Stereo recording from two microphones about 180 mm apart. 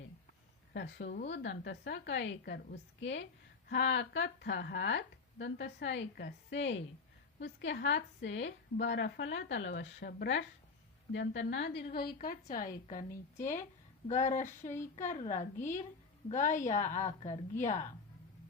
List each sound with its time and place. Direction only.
0.7 s a woman's voice: 70° left (ahead or behind)
1.3 s a woman's voice: 85° left; by 10.4 s 70° left (ahead or behind)
11.1 s a woman's voice: 90° left; by 17.8 s 40° left (ahead or behind)